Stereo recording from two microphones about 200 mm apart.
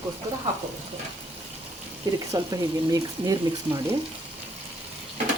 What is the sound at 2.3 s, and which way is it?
Speech, 20° right (ahead or behind).